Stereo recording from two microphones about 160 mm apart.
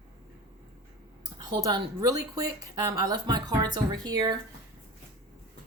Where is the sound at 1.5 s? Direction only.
25° right (ahead or behind).